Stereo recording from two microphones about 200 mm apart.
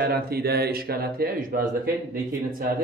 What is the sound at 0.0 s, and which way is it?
Speech, 50° right (ahead or behind).